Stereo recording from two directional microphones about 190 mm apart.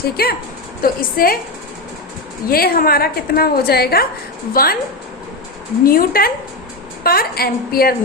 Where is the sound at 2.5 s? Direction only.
50° left (ahead or behind).